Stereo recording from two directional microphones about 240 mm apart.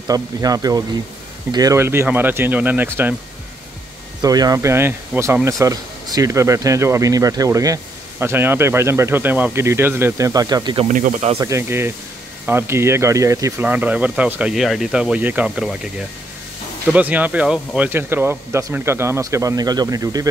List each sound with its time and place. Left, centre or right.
0.1 s speech: centre
4.2 s speech: centre
10.9 s speech: right
11.3 s speech: centre